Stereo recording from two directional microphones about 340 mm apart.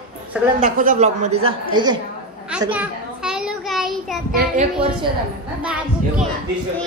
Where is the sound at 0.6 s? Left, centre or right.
Right.